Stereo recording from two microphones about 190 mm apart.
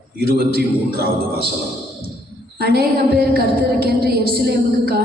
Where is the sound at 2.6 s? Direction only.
55° right (ahead or behind).